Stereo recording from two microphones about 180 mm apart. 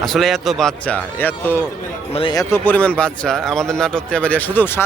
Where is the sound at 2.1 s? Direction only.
25° left (ahead or behind).